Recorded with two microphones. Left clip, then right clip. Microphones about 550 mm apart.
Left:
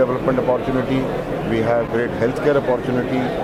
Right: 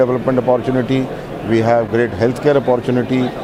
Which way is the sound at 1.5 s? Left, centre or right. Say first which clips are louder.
Right 5 dB; right.